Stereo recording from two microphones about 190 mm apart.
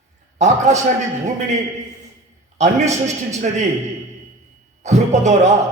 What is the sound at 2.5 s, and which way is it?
A man's voice, 40° right (ahead or behind).